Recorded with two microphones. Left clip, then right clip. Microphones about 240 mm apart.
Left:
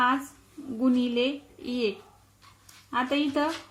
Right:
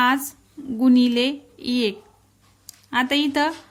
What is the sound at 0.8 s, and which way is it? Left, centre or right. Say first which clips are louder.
Speech: right 7 dB; right.